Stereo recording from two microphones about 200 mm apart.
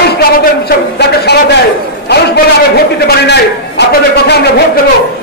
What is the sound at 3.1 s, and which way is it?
A man's voice, 55° left (ahead or behind).